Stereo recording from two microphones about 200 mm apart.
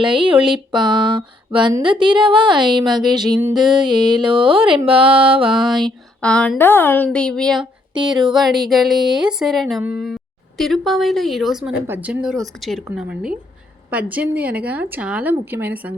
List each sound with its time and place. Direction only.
0.0 s music: 25° right (ahead or behind)
5.6 s speech: centre (ahead or behind)
7.9 s music: 20° right (ahead or behind)
8.2 s speech: centre (ahead or behind)